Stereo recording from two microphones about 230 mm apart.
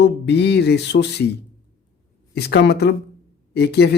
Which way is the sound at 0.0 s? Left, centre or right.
Left.